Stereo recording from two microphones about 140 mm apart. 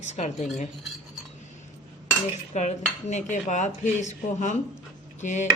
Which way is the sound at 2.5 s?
55° left (ahead or behind).